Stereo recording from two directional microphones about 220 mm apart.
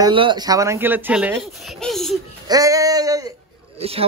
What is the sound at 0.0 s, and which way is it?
Speech, 20° right (ahead or behind).